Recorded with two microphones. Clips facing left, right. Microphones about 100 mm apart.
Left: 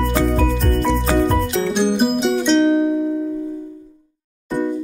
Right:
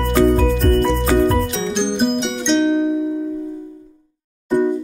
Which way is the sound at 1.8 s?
5° left (ahead or behind).